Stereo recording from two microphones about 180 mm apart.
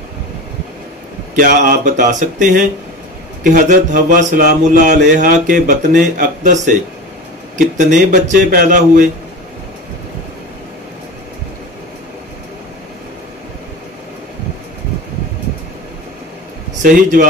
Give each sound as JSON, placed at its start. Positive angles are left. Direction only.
{"t": 1.3, "sound": "a man's voice", "side_deg": -50}
{"t": 16.8, "sound": "a man's voice", "side_deg": -50}